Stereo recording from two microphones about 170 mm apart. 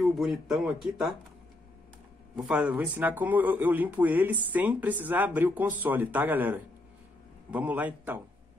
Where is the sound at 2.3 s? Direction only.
5° right (ahead or behind).